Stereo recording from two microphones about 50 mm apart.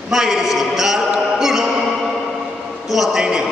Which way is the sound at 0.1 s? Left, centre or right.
Centre.